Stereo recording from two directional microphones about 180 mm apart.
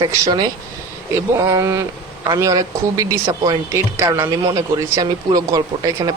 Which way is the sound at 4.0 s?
15° right (ahead or behind).